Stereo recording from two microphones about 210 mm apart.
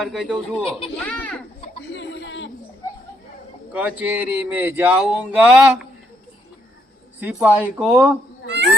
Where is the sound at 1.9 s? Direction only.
60° left (ahead or behind).